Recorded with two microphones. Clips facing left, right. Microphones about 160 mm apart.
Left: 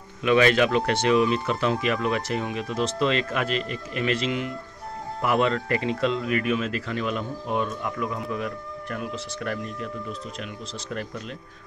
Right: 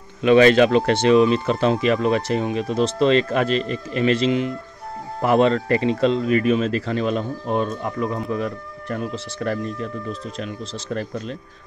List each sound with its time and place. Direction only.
0.2 s a man's voice: 30° right (ahead or behind)